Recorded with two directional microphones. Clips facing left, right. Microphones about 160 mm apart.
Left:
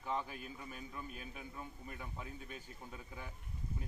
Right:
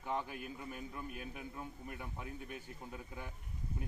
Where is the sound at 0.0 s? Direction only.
15° right (ahead or behind).